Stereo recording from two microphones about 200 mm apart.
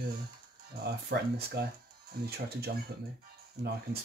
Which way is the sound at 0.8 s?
55° right (ahead or behind).